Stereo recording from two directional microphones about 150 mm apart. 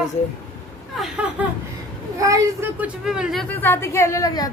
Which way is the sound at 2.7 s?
5° right (ahead or behind).